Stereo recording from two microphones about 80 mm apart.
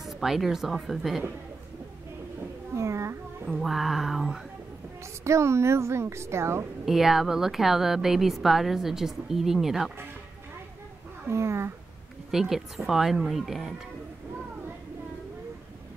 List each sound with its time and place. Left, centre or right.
0.0 s a woman's voice: centre
2.7 s a woman's voice: right
3.4 s a woman's voice: centre
5.2 s a woman's voice: right
6.9 s a woman's voice: centre
11.2 s a woman's voice: right
12.3 s a woman's voice: centre